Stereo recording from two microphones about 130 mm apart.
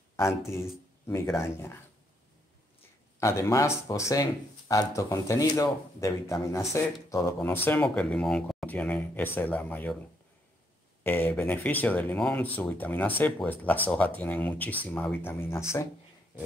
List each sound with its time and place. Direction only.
1.0 s speech: 20° left (ahead or behind)
3.2 s speech: 20° left (ahead or behind)
11.1 s speech: 15° left (ahead or behind)